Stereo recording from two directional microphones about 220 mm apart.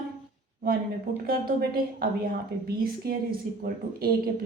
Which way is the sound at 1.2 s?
40° right (ahead or behind).